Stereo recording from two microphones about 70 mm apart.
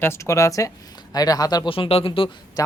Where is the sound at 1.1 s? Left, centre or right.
Left.